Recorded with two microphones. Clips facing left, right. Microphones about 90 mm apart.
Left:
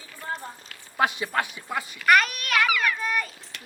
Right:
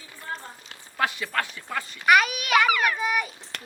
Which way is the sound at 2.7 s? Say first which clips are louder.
Right 1 dB; 45° right (ahead or behind).